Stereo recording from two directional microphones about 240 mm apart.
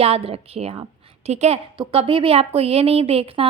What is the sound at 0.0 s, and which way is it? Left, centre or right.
A woman's voice, right.